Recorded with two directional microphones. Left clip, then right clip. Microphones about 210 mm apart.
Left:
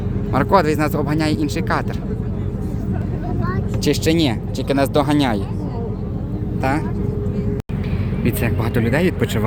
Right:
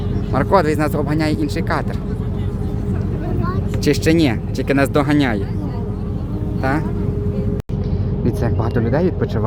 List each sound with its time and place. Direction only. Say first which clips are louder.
0.3 s speech: even; centre (ahead or behind)
3.8 s speech: right 2 dB; 15° right (ahead or behind)
6.6 s speech: even; 5° right (ahead or behind)
8.8 s speech: even; 10° left (ahead or behind)